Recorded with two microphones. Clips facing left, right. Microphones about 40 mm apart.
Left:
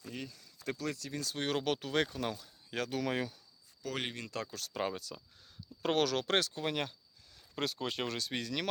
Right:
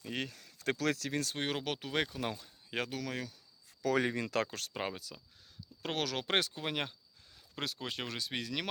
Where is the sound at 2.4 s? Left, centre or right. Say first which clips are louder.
Even; right.